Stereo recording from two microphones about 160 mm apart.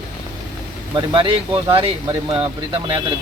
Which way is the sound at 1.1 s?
35° right (ahead or behind).